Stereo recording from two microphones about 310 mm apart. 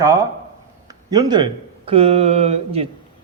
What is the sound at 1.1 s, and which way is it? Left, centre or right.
Speech, centre.